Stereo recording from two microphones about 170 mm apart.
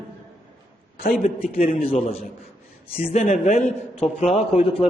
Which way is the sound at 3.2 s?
45° left (ahead or behind).